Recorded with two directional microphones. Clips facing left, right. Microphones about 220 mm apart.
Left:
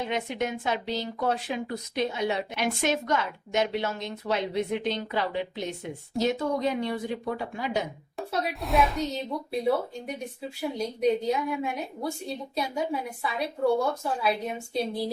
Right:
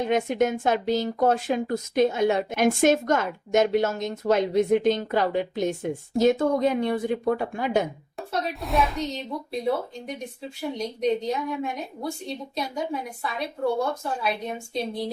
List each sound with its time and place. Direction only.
0.0 s speech: 45° right (ahead or behind)
8.3 s speech: centre (ahead or behind)
12.7 s speech: centre (ahead or behind)